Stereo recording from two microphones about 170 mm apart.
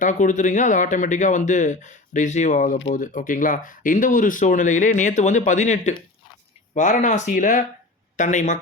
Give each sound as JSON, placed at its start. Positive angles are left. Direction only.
{"t": 0.0, "sound": "speech", "side_deg": 45}